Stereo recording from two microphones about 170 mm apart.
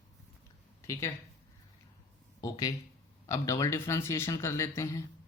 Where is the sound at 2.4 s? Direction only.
20° left (ahead or behind).